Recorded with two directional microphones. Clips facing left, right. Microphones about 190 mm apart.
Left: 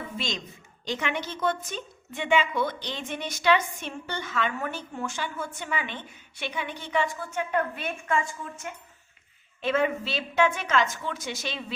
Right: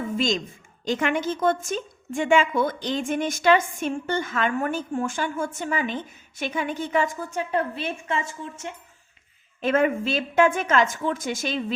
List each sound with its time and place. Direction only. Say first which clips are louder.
0.0 s a sound: right 9 dB; 45° right (ahead or behind)
0.9 s a woman's voice: right 7 dB; 50° right (ahead or behind); by 8.2 s 25° right (ahead or behind)
9.6 s a woman's voice: right 4 dB; 45° right (ahead or behind)